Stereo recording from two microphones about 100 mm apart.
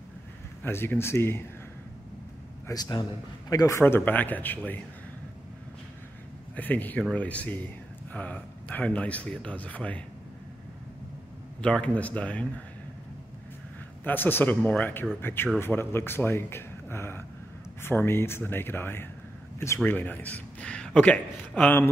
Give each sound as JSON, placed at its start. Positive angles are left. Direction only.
{"t": 0.7, "sound": "speech", "side_deg": 25}
{"t": 2.7, "sound": "a man's voice", "side_deg": 40}
{"t": 3.8, "sound": "speech", "side_deg": 20}
{"t": 6.5, "sound": "speech", "side_deg": 15}
{"t": 11.6, "sound": "speech", "side_deg": 10}
{"t": 14.0, "sound": "speech", "side_deg": 20}